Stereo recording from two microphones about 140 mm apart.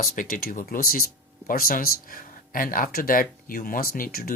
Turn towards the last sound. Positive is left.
turn(degrees=90)